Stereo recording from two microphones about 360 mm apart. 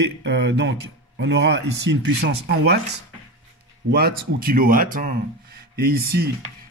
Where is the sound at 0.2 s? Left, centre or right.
Right.